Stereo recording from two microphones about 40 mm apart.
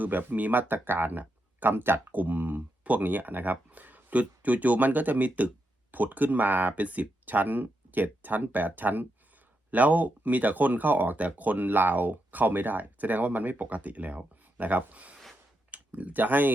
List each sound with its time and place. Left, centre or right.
0.0 s speech: right
0.7 s speech: right
1.2 s a sound: right
1.7 s speech: right
2.1 s speech: right